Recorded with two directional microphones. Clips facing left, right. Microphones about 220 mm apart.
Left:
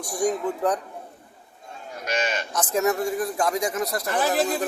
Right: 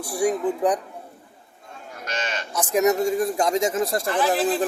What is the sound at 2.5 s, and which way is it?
Speech, 15° right (ahead or behind).